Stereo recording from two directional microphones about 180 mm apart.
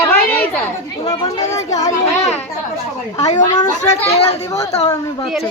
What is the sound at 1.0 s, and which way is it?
Speech, 20° left (ahead or behind).